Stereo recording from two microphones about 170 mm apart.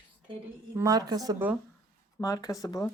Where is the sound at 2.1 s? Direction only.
20° left (ahead or behind).